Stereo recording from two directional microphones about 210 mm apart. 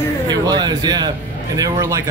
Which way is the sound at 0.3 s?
20° right (ahead or behind).